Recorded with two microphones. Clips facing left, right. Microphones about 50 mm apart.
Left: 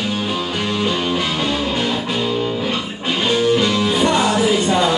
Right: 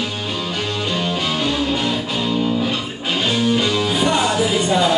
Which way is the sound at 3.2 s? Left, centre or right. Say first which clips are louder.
Left 3 dB; centre.